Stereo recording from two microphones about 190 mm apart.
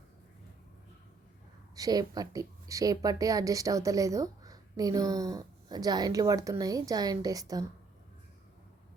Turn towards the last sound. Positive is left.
turn(degrees=-20)  # may be behind; listen again after turning